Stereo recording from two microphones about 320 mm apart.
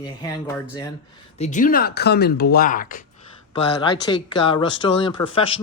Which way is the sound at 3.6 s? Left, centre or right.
Centre.